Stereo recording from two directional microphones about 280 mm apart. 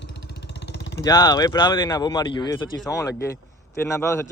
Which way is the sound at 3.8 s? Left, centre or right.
Centre.